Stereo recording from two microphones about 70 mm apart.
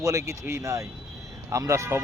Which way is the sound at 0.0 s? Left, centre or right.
Right.